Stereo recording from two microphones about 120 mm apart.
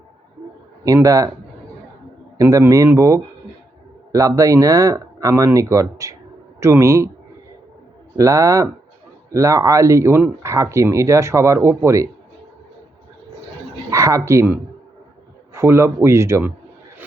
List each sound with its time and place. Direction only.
0.9 s speech: 30° right (ahead or behind)
2.4 s speech: 25° right (ahead or behind)
8.1 s speech: 25° right (ahead or behind)
13.9 s speech: 25° right (ahead or behind)